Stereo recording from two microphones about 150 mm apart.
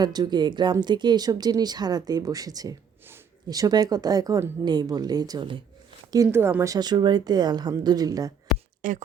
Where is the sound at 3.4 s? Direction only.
25° right (ahead or behind).